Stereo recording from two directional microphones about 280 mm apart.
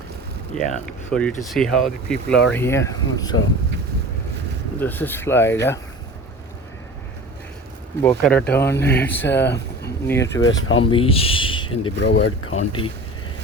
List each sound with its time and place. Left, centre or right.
0.5 s speech: centre
4.8 s speech: centre
8.0 s speech: centre
10.6 s speech: left
10.9 s speech: centre
11.9 s speech: left
12.5 s speech: centre